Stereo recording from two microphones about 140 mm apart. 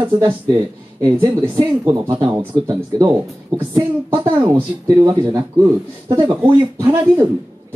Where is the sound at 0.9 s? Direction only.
15° right (ahead or behind).